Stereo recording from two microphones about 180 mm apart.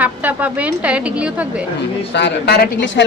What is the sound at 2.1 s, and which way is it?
Speech, 70° left (ahead or behind).